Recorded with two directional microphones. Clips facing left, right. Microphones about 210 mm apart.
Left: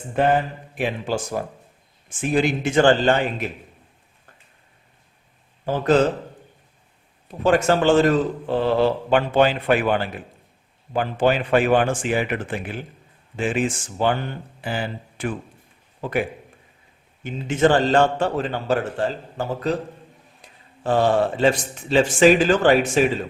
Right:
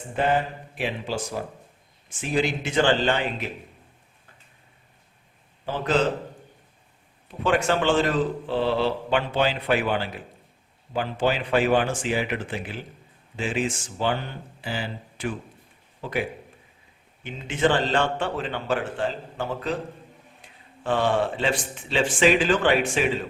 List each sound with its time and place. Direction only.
0.8 s a man's voice: 50° left (ahead or behind)
5.6 s a man's voice: 45° left (ahead or behind)
7.3 s a man's voice: 40° left (ahead or behind)
17.5 s a man's voice: 45° left (ahead or behind)